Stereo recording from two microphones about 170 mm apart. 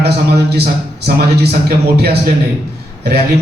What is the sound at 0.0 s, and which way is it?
Speech, 70° right (ahead or behind).